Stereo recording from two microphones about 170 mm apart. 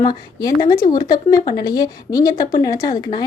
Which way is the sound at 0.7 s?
55° left (ahead or behind).